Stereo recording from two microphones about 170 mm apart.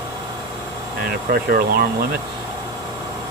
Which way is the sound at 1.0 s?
60° right (ahead or behind).